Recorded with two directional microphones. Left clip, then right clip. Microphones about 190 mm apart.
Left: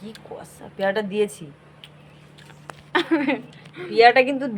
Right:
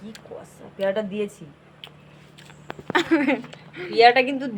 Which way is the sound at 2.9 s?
20° right (ahead or behind).